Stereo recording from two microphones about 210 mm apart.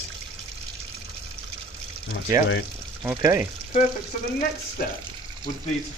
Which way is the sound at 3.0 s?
15° right (ahead or behind).